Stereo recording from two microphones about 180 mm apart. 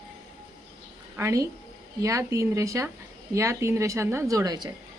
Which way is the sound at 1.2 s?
15° right (ahead or behind).